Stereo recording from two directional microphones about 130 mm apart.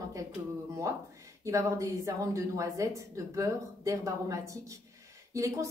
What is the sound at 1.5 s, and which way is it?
A woman's voice, 25° right (ahead or behind).